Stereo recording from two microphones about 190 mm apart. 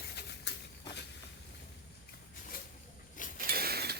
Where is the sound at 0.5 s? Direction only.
65° left (ahead or behind).